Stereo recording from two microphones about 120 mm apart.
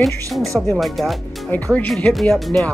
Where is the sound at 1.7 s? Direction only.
10° left (ahead or behind).